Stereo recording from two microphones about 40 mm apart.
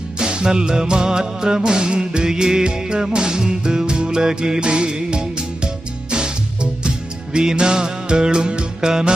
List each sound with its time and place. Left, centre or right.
0.2 s music: right